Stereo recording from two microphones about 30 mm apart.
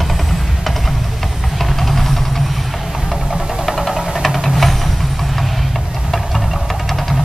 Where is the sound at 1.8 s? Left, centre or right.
Centre.